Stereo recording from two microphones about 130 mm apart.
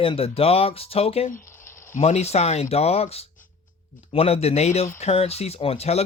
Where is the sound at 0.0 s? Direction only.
45° left (ahead or behind).